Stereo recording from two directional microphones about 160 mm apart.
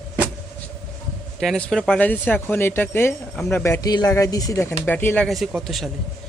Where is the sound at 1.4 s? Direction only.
Centre (ahead or behind).